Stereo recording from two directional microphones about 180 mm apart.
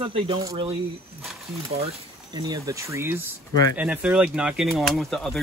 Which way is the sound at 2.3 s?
20° right (ahead or behind).